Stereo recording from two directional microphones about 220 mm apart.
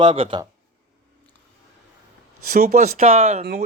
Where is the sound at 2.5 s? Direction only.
35° right (ahead or behind).